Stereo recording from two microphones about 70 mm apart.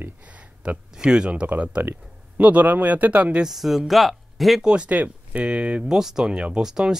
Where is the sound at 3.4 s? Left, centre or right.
Centre.